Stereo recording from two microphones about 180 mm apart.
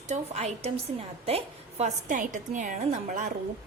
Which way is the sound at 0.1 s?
35° right (ahead or behind).